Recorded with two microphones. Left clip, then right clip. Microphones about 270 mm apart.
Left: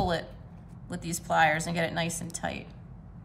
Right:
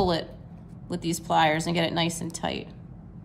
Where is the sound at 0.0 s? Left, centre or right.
Centre.